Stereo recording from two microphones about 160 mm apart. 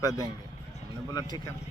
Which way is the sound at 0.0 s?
20° left (ahead or behind).